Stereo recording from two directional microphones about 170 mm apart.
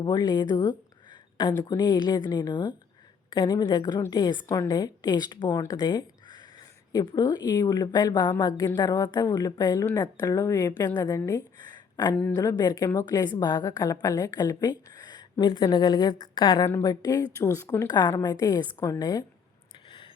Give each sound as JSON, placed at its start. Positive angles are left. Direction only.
{"t": 0.0, "sound": "a woman's voice", "side_deg": 25}
{"t": 11.2, "sound": "a sound", "side_deg": 20}
{"t": 12.3, "sound": "a woman's voice", "side_deg": 20}